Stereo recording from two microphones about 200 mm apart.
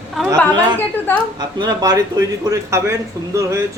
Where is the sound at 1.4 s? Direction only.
20° right (ahead or behind).